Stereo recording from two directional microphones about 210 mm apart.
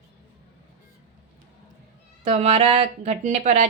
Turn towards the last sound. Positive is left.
turn(degrees=-35)  # may be behind; listen again after turning